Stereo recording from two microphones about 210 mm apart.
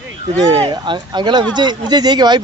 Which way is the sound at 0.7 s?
20° right (ahead or behind).